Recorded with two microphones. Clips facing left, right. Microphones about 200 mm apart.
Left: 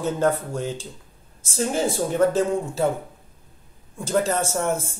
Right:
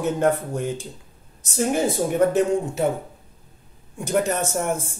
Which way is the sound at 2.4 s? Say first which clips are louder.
Right 2 dB; 20° right (ahead or behind).